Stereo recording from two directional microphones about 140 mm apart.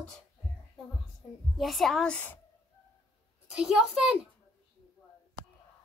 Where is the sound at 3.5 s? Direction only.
5° right (ahead or behind).